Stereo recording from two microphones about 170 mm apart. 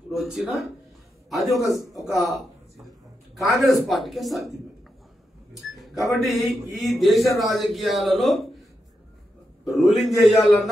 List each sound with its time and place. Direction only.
0.1 s a man's voice: centre (ahead or behind)
1.6 s a man's voice: 20° left (ahead or behind)
3.3 s a man's voice: centre (ahead or behind)
5.6 s a man's voice: centre (ahead or behind)
9.7 s a man's voice: centre (ahead or behind)